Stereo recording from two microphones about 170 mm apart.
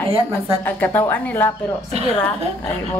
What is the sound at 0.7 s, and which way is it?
Speech, 10° left (ahead or behind).